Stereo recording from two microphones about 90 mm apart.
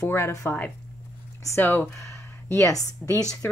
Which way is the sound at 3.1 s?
45° left (ahead or behind).